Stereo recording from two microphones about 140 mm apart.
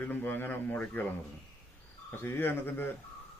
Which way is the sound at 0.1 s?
15° left (ahead or behind).